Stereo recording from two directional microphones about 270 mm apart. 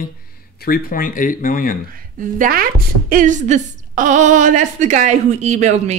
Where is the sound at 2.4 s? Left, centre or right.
Right.